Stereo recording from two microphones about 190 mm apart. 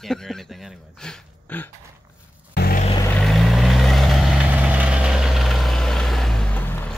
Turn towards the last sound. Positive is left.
turn(degrees=10)  # may be behind; listen again after turning